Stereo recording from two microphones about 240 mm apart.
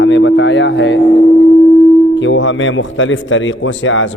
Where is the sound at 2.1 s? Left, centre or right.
Left.